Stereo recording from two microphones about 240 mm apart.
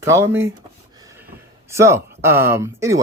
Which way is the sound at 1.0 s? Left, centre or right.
Centre.